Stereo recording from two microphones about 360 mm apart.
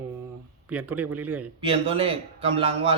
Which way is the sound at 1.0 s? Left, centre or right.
Right.